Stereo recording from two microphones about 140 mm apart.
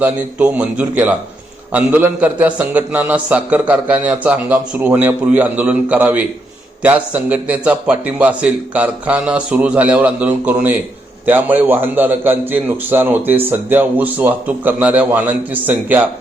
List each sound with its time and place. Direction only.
0.0 s a man's voice: 10° right (ahead or behind)